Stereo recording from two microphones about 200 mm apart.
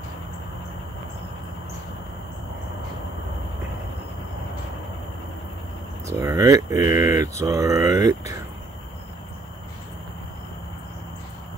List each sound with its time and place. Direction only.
6.0 s speech: 15° right (ahead or behind)